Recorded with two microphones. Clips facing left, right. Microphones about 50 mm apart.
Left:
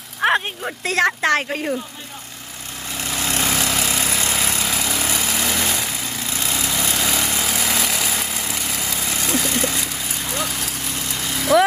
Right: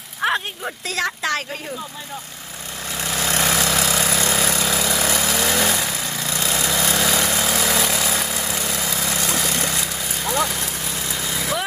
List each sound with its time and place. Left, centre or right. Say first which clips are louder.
0.2 s a sound: left 3 dB; left
0.9 s a woman's voice: left 6 dB; left
3.1 s vehicle: right 1 dB; right
6.2 s lawn mower: right 2 dB; right
6.7 s vehicle: right 3 dB; right
9.1 s vehicle: left 3 dB; centre
11.5 s vehicle: left 12 dB; left